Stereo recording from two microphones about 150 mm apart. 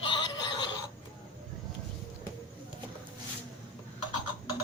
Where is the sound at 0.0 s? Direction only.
30° left (ahead or behind).